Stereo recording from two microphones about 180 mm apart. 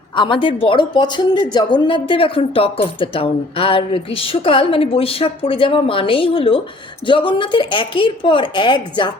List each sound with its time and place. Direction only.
0.2 s speech: 30° left (ahead or behind)